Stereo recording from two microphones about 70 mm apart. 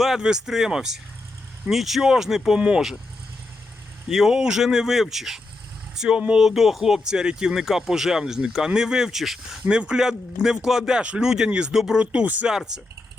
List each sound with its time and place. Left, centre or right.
0.0 s speech: centre
2.6 s speech: centre
4.1 s speech: centre
12.5 s speech: centre